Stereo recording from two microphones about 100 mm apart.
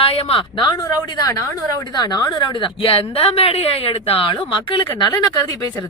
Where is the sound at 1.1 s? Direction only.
40° left (ahead or behind); by 4.9 s 55° left (ahead or behind).